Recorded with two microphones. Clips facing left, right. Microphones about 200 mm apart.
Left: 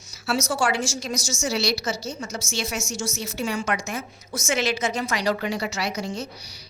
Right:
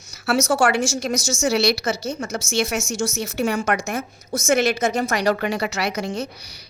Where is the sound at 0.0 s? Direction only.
65° right (ahead or behind).